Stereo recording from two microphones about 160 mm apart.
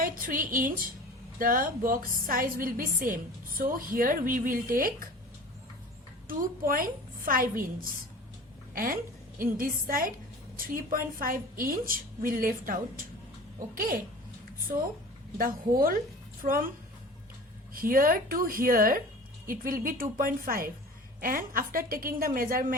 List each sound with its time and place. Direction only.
0.0 s a woman's voice: 60° right (ahead or behind)
6.2 s a woman's voice: 60° right (ahead or behind)
15.4 s a woman's voice: 65° right (ahead or behind)
17.7 s a woman's voice: 65° right (ahead or behind)